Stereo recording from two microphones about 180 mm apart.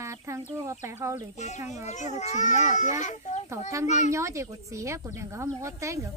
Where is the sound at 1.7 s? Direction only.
40° left (ahead or behind).